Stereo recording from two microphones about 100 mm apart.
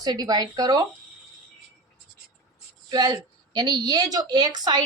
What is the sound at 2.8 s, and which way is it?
A woman's voice, 40° right (ahead or behind).